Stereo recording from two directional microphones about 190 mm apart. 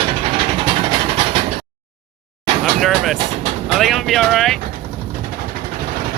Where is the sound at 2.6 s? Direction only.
Centre (ahead or behind).